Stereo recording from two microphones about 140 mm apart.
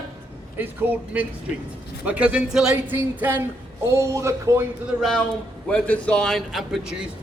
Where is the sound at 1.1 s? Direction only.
10° right (ahead or behind).